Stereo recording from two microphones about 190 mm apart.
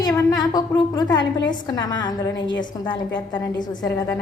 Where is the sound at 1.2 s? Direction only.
70° left (ahead or behind).